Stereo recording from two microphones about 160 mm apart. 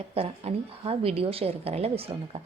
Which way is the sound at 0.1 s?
35° right (ahead or behind).